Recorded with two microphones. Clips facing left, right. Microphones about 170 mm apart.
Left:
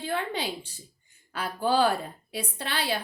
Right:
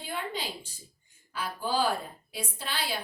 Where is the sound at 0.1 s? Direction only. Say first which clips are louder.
Left 4 dB; 65° left (ahead or behind).